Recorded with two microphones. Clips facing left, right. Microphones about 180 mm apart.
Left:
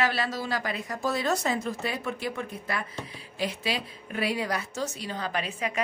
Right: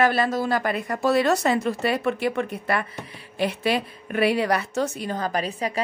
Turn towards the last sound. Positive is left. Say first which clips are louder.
# right 4 dB
turn(degrees=-35)  # may be behind; listen again after turning